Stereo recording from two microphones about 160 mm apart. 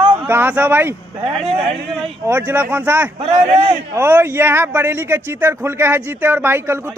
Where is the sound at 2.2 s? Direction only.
15° right (ahead or behind).